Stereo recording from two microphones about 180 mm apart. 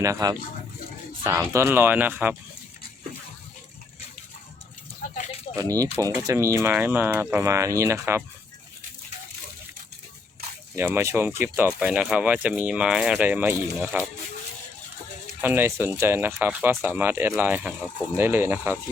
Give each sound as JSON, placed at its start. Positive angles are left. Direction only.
{"t": 0.0, "sound": "speech", "side_deg": -20}
{"t": 5.1, "sound": "a sound", "side_deg": 40}
{"t": 5.5, "sound": "speech", "side_deg": -20}
{"t": 10.8, "sound": "speech", "side_deg": -15}
{"t": 15.4, "sound": "speech", "side_deg": -10}